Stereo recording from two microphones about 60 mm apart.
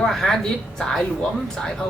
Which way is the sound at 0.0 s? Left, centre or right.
Centre.